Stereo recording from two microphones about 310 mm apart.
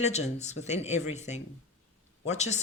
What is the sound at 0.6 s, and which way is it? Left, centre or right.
Speech, left.